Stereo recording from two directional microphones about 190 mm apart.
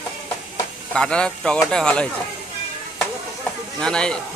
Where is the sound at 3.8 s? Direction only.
5° left (ahead or behind).